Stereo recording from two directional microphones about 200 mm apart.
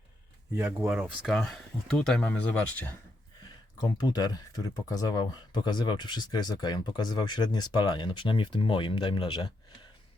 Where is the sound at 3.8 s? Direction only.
20° left (ahead or behind).